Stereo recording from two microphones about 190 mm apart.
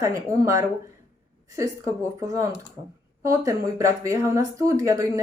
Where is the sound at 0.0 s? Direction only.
15° right (ahead or behind).